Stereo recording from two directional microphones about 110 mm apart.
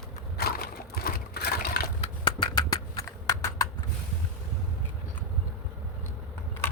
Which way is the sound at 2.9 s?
30° left (ahead or behind).